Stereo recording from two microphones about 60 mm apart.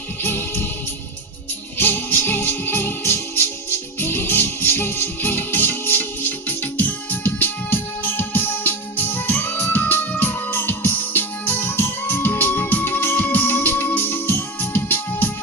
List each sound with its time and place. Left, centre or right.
0.2 s music: left
1.8 s music: left